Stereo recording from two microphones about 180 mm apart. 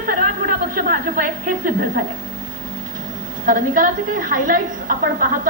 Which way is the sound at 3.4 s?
50° right (ahead or behind).